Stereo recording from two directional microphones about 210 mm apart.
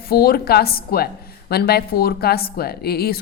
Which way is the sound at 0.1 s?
45° left (ahead or behind).